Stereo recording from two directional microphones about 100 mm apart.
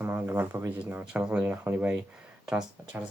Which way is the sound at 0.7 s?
20° right (ahead or behind).